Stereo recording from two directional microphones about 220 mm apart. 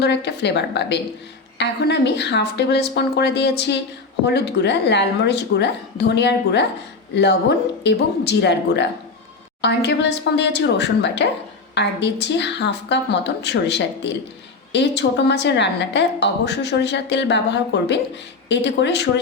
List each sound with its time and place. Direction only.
0.0 s a woman's voice: 50° left (ahead or behind)
7.9 s a woman's voice: 50° left (ahead or behind)